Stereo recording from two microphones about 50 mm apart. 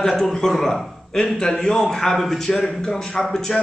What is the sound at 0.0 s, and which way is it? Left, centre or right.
A man's voice, centre.